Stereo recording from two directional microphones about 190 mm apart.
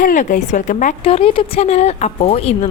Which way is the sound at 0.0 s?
45° left (ahead or behind).